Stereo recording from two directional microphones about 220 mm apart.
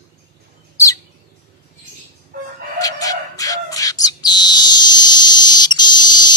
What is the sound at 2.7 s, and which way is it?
Bird, 15° left (ahead or behind).